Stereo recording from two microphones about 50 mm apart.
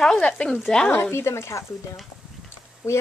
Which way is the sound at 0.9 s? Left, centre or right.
Left.